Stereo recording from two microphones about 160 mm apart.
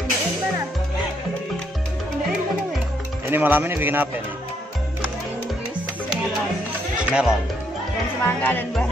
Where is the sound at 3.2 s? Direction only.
10° right (ahead or behind).